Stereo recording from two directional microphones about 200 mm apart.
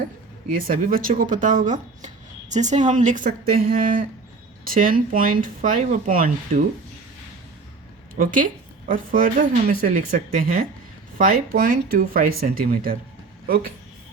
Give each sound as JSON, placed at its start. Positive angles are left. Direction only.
{"t": 0.5, "sound": "speech", "side_deg": -45}
{"t": 8.1, "sound": "speech", "side_deg": -45}